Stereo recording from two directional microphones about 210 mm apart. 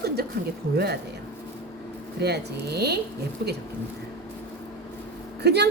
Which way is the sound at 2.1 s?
50° right (ahead or behind).